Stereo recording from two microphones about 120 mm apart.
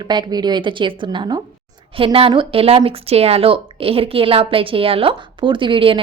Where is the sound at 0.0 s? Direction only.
35° right (ahead or behind).